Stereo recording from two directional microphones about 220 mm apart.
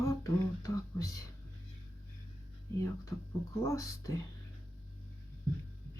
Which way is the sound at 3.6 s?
15° left (ahead or behind).